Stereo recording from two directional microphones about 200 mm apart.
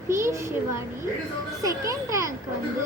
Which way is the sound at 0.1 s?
15° right (ahead or behind).